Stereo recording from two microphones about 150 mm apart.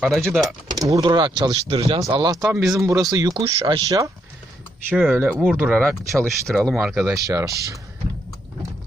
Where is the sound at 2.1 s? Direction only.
25° right (ahead or behind).